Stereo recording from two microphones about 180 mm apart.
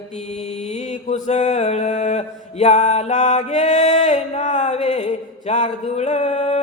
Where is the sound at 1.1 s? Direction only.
40° left (ahead or behind).